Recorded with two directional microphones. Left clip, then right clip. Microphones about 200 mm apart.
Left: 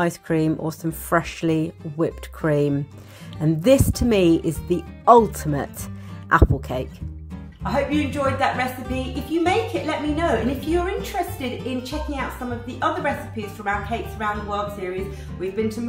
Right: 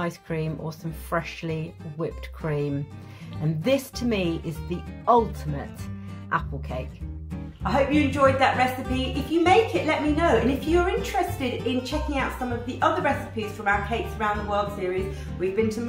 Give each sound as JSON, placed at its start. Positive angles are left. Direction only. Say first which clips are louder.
{"t": 0.0, "sound": "speech", "louder": "left 8 dB", "side_deg": 40}
{"t": 6.2, "sound": "speech", "louder": "left 9 dB", "side_deg": 40}
{"t": 7.6, "sound": "a woman's voice", "louder": "even", "side_deg": 0}